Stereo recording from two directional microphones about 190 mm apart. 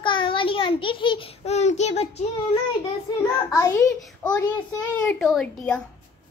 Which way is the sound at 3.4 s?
15° left (ahead or behind).